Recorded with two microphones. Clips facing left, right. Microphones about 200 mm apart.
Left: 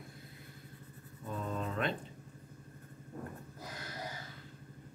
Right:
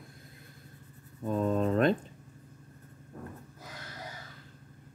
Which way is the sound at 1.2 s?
50° right (ahead or behind).